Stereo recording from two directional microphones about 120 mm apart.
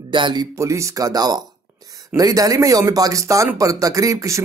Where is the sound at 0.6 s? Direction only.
25° right (ahead or behind).